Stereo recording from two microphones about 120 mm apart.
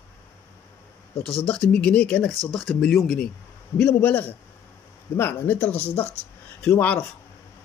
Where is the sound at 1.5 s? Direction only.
10° left (ahead or behind).